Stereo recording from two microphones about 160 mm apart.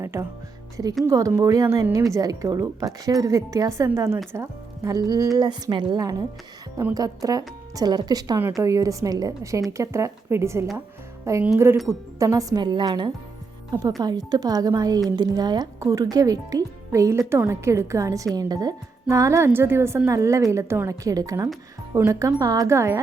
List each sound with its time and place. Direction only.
0.0 s a woman's voice: 15° right (ahead or behind)